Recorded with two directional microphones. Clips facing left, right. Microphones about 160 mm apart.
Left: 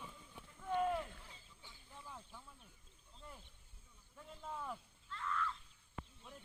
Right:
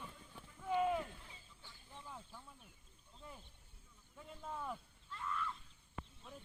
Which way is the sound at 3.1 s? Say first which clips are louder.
Right 1 dB; 5° right (ahead or behind).